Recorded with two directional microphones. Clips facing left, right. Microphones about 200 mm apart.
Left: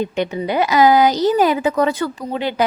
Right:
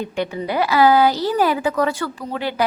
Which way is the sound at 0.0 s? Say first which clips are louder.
Left 3 dB; 20° left (ahead or behind).